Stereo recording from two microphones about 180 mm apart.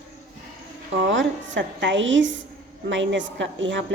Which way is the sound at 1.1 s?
90° right.